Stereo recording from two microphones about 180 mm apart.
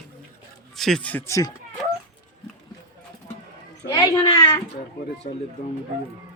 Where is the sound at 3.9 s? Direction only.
20° left (ahead or behind).